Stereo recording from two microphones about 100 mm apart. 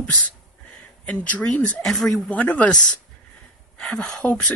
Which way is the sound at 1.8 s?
Centre (ahead or behind).